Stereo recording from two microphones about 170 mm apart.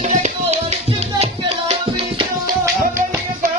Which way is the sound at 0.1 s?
45° right (ahead or behind).